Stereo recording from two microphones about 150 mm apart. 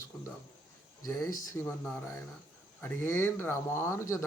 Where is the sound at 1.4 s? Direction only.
20° left (ahead or behind).